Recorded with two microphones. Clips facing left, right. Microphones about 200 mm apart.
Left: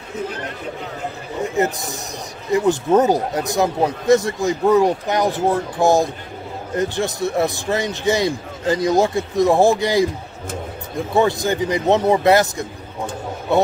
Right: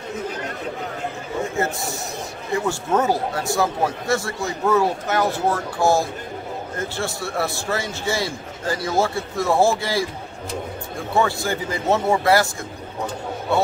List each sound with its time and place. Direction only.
1.4 s a man's voice: 20° left (ahead or behind)
11.1 s a man's voice: 20° left (ahead or behind)